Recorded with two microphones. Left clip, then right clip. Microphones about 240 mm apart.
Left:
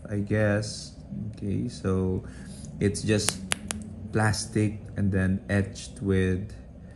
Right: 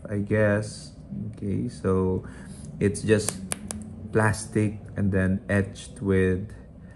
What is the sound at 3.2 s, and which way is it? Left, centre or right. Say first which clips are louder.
Finger snapping: left 3 dB; centre.